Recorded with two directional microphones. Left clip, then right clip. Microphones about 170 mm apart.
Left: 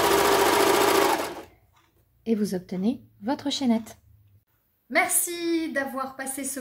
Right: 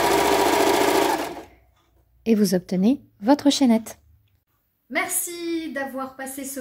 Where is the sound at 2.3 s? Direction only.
55° right (ahead or behind).